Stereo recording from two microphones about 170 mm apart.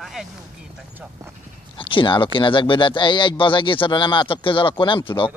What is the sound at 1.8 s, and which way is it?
Speech, 30° left (ahead or behind).